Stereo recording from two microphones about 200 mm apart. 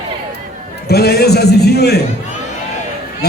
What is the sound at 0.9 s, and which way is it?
A man's voice, 55° left (ahead or behind).